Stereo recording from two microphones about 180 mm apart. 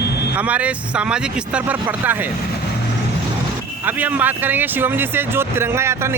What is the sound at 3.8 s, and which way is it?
Speech, 10° right (ahead or behind).